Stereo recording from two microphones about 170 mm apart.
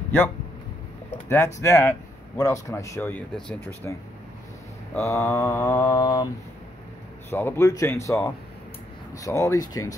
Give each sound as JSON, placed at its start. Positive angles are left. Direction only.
{"t": 1.1, "sound": "a man's voice", "side_deg": 15}
{"t": 4.9, "sound": "a man's voice", "side_deg": 15}